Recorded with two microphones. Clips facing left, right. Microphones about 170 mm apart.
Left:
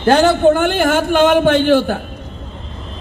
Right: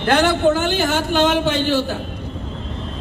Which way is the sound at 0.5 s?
55° left (ahead or behind).